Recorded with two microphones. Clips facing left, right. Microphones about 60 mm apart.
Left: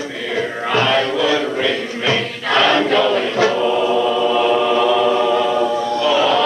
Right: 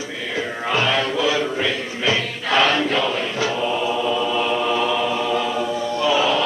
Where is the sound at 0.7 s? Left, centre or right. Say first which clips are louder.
Left 4 dB; centre.